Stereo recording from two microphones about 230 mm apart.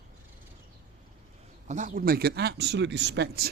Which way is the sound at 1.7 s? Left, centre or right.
Right.